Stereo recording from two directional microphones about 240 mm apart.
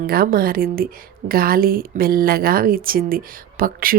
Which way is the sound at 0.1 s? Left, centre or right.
Right.